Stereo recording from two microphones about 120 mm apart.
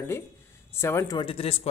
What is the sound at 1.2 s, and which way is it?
Speech, 50° left (ahead or behind).